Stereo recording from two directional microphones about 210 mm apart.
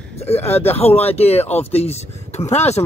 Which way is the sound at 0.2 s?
30° left (ahead or behind).